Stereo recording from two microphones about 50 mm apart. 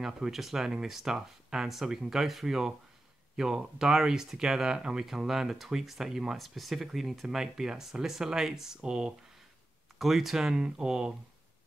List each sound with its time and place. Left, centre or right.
0.0 s speech: centre
9.9 s speech: centre